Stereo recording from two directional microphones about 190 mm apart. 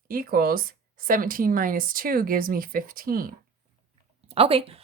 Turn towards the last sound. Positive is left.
turn(degrees=-30)  # may be behind; listen again after turning